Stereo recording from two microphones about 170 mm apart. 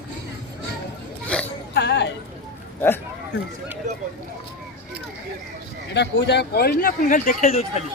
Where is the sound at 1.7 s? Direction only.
90° left.